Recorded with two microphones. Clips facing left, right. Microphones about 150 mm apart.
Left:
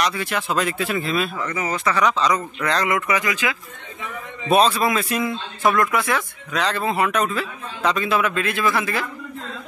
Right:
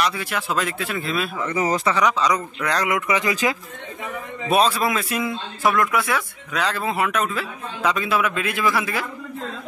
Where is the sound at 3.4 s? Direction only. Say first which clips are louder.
Right 3 dB; 35° right (ahead or behind).